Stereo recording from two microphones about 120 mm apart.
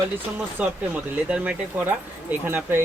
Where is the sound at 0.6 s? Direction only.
10° right (ahead or behind).